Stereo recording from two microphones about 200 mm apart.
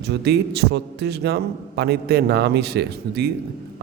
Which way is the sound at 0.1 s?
55° right (ahead or behind).